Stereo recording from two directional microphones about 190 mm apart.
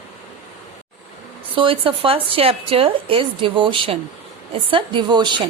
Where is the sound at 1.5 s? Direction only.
30° right (ahead or behind).